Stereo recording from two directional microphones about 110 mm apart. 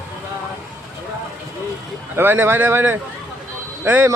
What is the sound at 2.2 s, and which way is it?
Speech, 20° right (ahead or behind).